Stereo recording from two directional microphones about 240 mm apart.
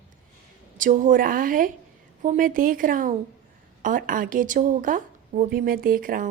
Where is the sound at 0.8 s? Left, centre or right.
Right.